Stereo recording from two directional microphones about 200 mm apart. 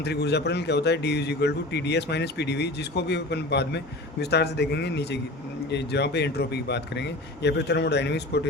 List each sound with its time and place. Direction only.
0.0 s a man's voice: 55° left (ahead or behind)